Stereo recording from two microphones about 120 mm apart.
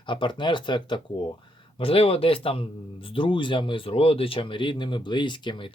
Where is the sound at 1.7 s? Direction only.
50° left (ahead or behind).